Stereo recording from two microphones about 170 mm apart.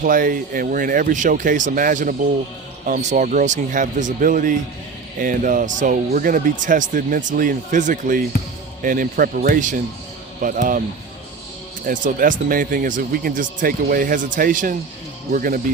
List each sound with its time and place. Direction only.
0.0 s a man's voice: 50° right (ahead or behind)
11.9 s a man's voice: 50° right (ahead or behind)